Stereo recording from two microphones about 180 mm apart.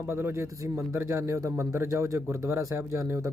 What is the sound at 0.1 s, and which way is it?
A man's voice, 15° right (ahead or behind).